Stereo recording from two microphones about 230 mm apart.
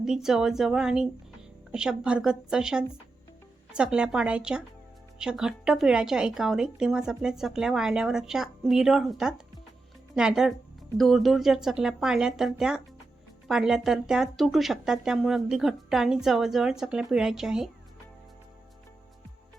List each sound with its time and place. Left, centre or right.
0.0 s speech: centre